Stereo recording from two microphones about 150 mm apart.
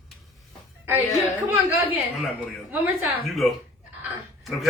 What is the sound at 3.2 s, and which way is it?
Speech, centre (ahead or behind).